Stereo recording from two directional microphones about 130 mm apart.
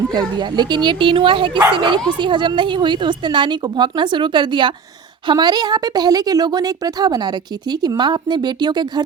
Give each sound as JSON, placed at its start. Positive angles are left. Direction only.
{"t": 0.1, "sound": "a woman's voice", "side_deg": -35}